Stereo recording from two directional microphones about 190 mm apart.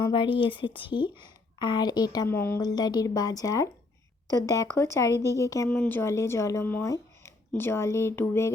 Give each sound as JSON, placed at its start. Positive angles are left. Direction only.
{"t": 0.0, "sound": "a woman's voice", "side_deg": 25}
{"t": 5.6, "sound": "speech", "side_deg": 5}